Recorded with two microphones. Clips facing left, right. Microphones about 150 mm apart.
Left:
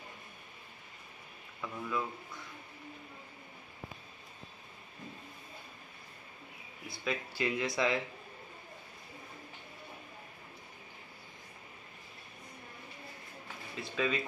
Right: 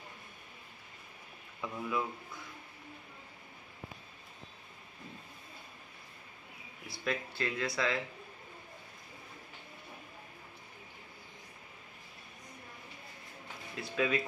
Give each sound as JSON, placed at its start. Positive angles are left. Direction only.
{"t": 1.6, "sound": "speech", "side_deg": -15}
{"t": 7.1, "sound": "speech", "side_deg": 10}
{"t": 13.7, "sound": "speech", "side_deg": 0}